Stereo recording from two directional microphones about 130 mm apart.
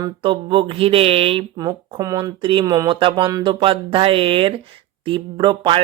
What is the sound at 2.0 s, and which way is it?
Speech, 25° right (ahead or behind).